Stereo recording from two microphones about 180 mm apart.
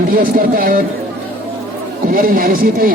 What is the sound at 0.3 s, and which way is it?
Speech, 50° right (ahead or behind).